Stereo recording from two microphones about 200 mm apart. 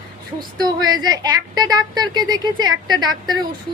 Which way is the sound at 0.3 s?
20° right (ahead or behind).